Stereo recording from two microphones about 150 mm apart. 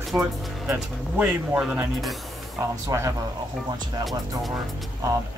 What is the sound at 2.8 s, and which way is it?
Speech, 20° right (ahead or behind).